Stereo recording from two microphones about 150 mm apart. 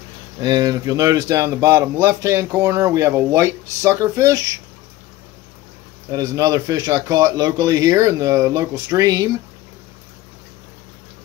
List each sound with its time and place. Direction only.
0.4 s speech: 25° right (ahead or behind)
6.1 s speech: 25° right (ahead or behind)